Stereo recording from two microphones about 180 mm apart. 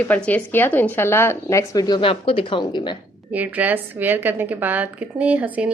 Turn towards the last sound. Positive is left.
turn(degrees=-10)  # may be behind; listen again after turning